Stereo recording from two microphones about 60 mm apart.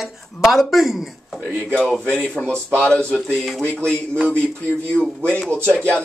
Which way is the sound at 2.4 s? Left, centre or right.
Left.